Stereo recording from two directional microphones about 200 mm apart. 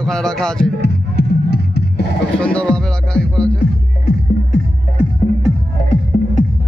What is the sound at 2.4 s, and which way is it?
Music, 5° left (ahead or behind).